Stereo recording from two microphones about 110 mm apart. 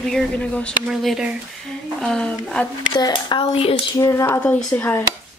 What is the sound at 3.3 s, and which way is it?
Speech, 60° left (ahead or behind).